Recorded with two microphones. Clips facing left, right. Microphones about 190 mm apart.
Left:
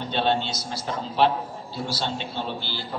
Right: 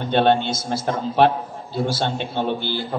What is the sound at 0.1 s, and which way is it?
A man's voice, 55° right (ahead or behind).